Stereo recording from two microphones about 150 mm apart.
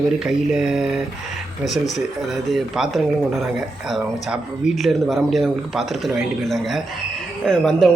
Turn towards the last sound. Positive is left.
turn(degrees=5)  # may be behind; listen again after turning